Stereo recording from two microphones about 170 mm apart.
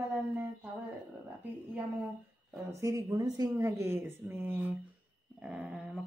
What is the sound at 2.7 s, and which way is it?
Speech, 15° right (ahead or behind).